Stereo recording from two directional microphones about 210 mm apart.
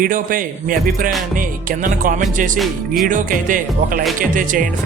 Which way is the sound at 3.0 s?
40° right (ahead or behind).